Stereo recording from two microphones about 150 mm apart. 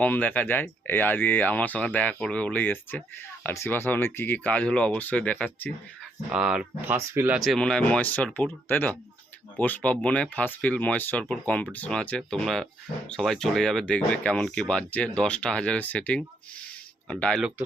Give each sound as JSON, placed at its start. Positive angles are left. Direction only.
{"t": 0.0, "sound": "speech", "side_deg": 10}
{"t": 6.3, "sound": "speech", "side_deg": -5}
{"t": 6.9, "sound": "speech", "side_deg": -20}
{"t": 7.3, "sound": "speech", "side_deg": 0}